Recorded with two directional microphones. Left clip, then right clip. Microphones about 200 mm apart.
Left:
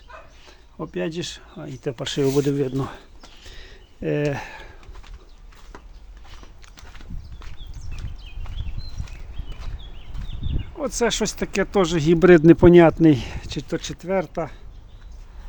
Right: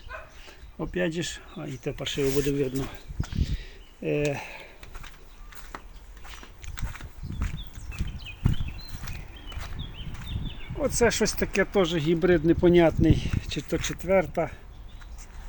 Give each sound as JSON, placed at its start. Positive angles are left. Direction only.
{"t": 0.4, "sound": "speech", "side_deg": 0}
{"t": 1.8, "sound": "speech", "side_deg": 20}
{"t": 3.5, "sound": "a sound", "side_deg": 20}
{"t": 10.8, "sound": "speech", "side_deg": 10}
{"t": 11.5, "sound": "speech", "side_deg": 25}
{"t": 13.5, "sound": "speech", "side_deg": 15}